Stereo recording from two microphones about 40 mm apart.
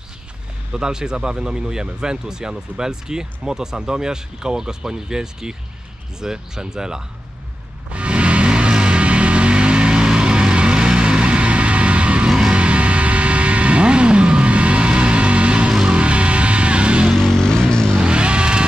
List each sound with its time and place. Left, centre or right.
0.7 s speech: centre
7.9 s music: right
12.3 s vehicle: right
15.9 s music: right
17.4 s vehicle: centre
18.0 s a sound: right